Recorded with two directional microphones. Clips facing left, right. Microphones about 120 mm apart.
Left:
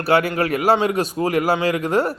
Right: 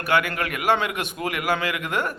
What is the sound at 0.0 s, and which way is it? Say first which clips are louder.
A man's voice: left 5 dB; 35° left (ahead or behind).